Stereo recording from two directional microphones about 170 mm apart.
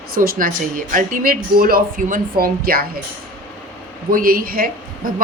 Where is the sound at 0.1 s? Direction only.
55° right (ahead or behind).